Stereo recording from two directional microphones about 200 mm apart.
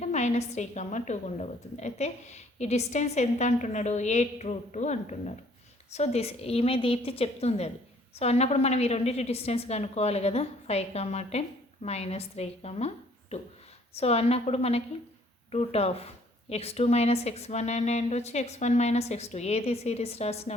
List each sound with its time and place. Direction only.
0.0 s a woman's voice: 35° left (ahead or behind)
13.9 s a woman's voice: 30° left (ahead or behind)